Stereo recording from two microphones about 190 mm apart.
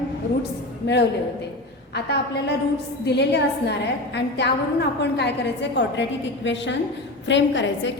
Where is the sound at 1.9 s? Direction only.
60° left (ahead or behind).